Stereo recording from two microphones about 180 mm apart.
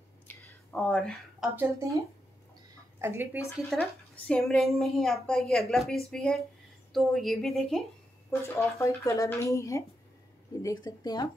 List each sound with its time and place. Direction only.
0.3 s whispering: 5° left (ahead or behind)
1.6 s speech: 15° right (ahead or behind)
3.0 s speech: 15° right (ahead or behind)
3.8 s a woman's voice: 5° left (ahead or behind)
8.3 s speech: 15° left (ahead or behind)